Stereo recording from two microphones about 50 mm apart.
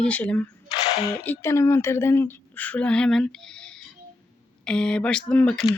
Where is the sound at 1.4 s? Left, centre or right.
Left.